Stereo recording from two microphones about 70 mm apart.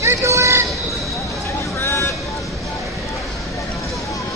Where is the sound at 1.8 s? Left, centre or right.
Left.